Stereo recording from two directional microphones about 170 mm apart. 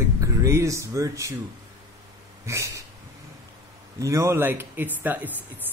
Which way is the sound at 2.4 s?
15° right (ahead or behind).